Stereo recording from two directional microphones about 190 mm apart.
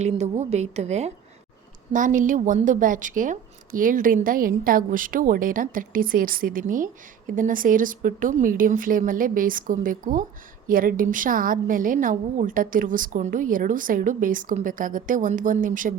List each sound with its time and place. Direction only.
0.0 s a woman's voice: 35° right (ahead or behind)